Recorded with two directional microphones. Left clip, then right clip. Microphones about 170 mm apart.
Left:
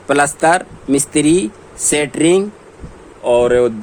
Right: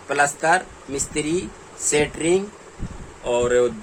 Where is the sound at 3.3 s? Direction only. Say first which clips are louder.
Left 7 dB; 50° left (ahead or behind).